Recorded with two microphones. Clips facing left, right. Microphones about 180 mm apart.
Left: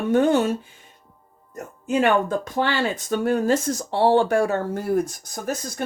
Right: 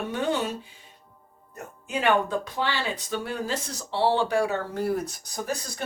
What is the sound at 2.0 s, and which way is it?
Speech, 45° left (ahead or behind).